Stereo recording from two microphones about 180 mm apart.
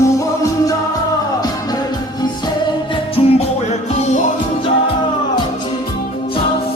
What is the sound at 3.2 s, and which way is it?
Music, 30° left (ahead or behind).